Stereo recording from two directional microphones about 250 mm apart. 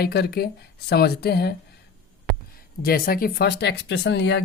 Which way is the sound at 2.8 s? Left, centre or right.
Left.